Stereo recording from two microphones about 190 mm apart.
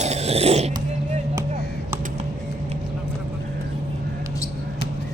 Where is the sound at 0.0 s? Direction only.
35° right (ahead or behind).